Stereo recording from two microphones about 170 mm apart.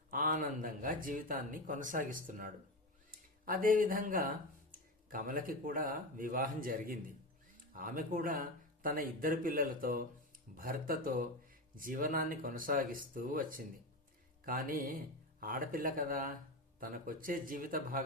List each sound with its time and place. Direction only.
0.1 s speech: 55° right (ahead or behind)